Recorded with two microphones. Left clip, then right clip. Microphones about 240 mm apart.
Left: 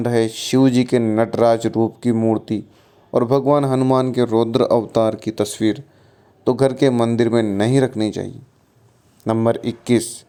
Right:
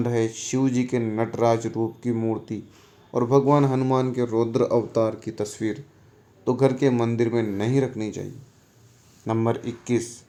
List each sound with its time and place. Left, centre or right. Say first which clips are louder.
0.0 s a man's voice: left 6 dB; left